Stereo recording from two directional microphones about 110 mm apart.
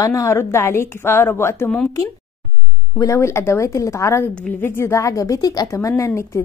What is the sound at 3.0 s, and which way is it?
A woman's voice, 25° left (ahead or behind).